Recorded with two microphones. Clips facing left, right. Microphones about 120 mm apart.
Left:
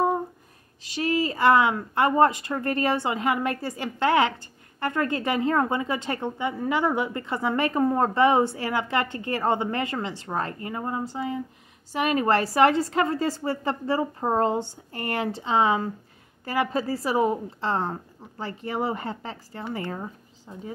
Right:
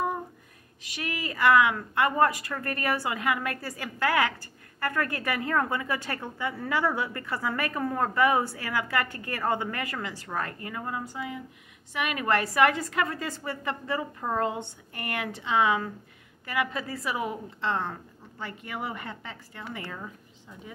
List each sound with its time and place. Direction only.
0.8 s a woman's voice: 30° left (ahead or behind)